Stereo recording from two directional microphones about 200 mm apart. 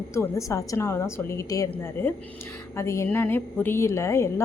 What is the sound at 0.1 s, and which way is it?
A woman's voice, 15° left (ahead or behind).